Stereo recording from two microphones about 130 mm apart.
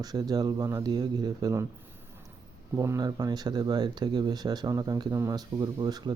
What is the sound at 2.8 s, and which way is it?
Speech, 30° right (ahead or behind).